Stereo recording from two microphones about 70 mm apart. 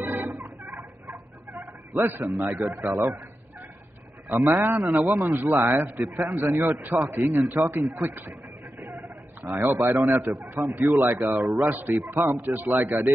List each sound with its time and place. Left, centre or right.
0.0 s turkey: right
2.0 s a man's voice: right
4.4 s a man's voice: right